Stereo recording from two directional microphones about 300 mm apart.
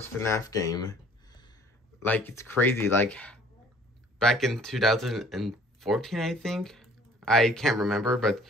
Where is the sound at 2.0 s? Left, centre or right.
Centre.